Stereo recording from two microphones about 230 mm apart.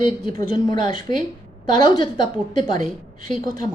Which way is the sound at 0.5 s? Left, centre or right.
Centre.